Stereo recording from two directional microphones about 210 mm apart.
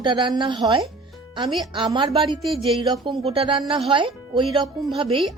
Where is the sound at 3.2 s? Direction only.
25° right (ahead or behind).